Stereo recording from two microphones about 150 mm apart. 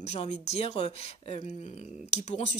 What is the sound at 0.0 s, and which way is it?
Speech, 45° left (ahead or behind).